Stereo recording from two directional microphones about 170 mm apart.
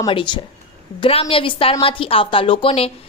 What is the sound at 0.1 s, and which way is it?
A woman's voice, 30° left (ahead or behind).